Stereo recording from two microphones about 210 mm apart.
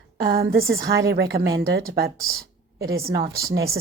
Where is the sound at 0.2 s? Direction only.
45° right (ahead or behind).